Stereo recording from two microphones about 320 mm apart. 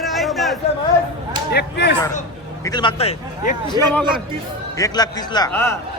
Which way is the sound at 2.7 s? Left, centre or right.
Centre.